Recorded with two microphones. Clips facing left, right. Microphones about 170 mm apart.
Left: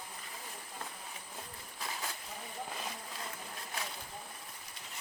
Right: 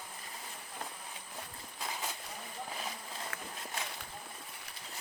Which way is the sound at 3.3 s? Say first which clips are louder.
Right 2 dB; 75° right (ahead or behind).